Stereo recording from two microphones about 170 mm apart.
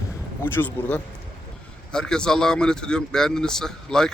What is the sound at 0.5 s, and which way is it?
Speech, 10° left (ahead or behind).